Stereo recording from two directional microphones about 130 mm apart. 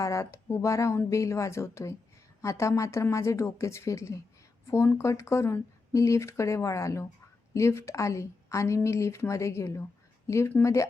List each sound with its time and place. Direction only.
0.0 s speech: 25° left (ahead or behind)